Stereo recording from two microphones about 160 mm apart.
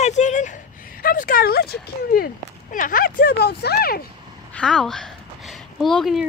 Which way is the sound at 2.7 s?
60° left (ahead or behind).